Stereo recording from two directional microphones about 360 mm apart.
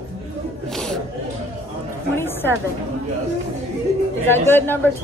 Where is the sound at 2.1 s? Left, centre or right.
Centre.